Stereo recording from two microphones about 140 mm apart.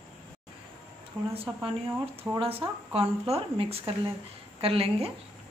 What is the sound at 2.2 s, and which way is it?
A woman's voice, 45° right (ahead or behind).